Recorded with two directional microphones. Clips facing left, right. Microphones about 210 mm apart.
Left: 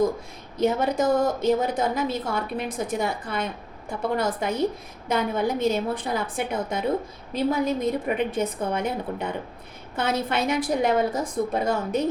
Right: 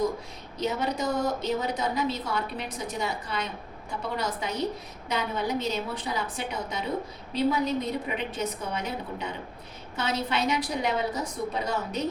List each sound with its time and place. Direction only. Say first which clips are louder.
0.6 s a woman's voice: left 6 dB; 50° left (ahead or behind)